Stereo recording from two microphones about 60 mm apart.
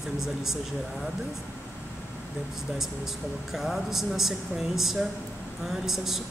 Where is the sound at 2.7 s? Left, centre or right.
Centre.